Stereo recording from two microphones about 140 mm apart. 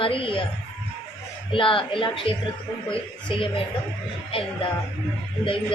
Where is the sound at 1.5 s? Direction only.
40° left (ahead or behind).